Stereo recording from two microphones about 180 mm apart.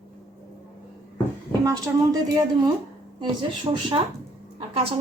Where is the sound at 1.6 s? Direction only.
20° right (ahead or behind).